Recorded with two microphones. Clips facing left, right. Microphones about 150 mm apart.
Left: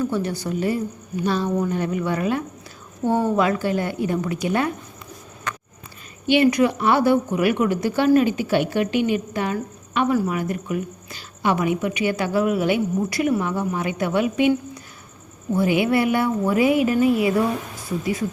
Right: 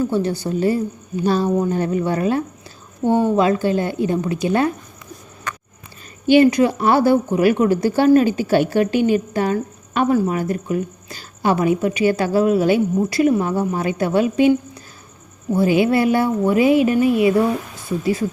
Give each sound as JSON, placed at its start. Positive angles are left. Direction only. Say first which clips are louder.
{"t": 0.0, "sound": "a woman's voice", "louder": "right 4 dB", "side_deg": -30}
{"t": 6.2, "sound": "a woman's voice", "louder": "right 4 dB", "side_deg": -40}
{"t": 15.5, "sound": "a woman's voice", "louder": "right 3 dB", "side_deg": -30}